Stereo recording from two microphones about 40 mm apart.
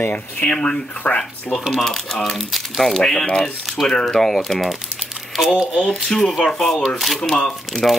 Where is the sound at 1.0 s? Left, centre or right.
Left.